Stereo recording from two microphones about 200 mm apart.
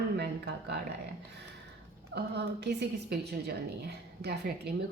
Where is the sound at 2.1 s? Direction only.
55° right (ahead or behind).